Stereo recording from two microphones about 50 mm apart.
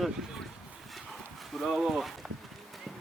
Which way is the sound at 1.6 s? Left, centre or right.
Centre.